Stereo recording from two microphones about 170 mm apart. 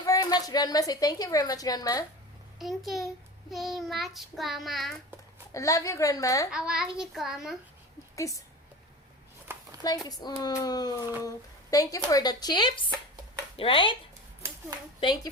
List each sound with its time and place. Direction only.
0.0 s a woman's voice: 20° left (ahead or behind)
2.6 s child singing: centre (ahead or behind)
5.5 s a woman's voice: 20° left (ahead or behind)
6.5 s child singing: 5° right (ahead or behind)
9.5 s a sound: 15° right (ahead or behind)
10.1 s a woman's voice: 20° left (ahead or behind)
15.0 s a woman's voice: 25° left (ahead or behind)